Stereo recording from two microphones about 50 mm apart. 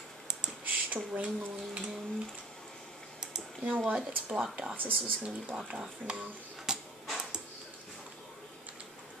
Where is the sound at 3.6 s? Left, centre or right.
Right.